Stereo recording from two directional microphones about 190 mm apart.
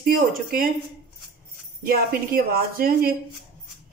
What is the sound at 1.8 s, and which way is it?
Speech, 50° right (ahead or behind).